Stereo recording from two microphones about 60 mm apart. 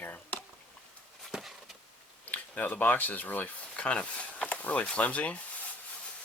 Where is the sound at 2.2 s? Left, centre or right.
Left.